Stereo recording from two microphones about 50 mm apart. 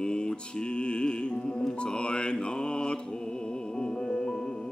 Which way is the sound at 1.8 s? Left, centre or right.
Centre.